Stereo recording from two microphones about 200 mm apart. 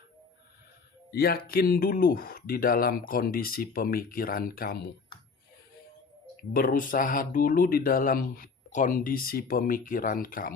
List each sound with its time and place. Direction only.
1.1 s speech: 50° left (ahead or behind)
6.5 s speech: 45° left (ahead or behind)